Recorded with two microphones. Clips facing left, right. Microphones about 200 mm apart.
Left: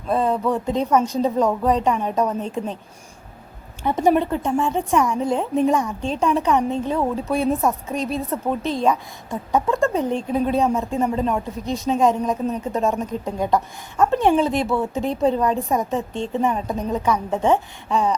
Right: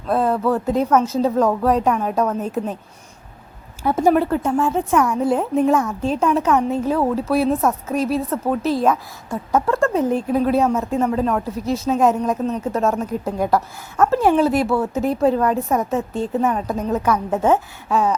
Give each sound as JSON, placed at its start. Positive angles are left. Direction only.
{"t": 0.1, "sound": "a woman's voice", "side_deg": -5}
{"t": 3.8, "sound": "a woman's voice", "side_deg": -5}